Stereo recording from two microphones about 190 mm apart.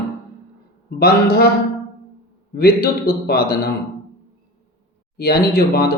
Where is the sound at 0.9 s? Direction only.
55° left (ahead or behind).